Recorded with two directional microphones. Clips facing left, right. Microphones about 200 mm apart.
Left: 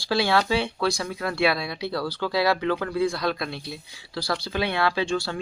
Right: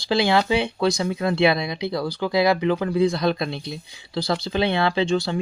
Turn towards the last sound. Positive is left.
turn(degrees=-20)  # may be behind; listen again after turning